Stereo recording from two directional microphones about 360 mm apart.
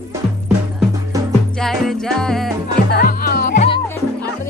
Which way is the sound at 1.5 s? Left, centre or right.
Centre.